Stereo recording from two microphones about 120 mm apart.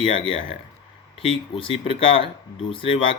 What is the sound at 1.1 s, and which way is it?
Speech, 50° left (ahead or behind).